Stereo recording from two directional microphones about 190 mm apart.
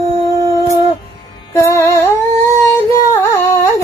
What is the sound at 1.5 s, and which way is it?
Music, 15° left (ahead or behind).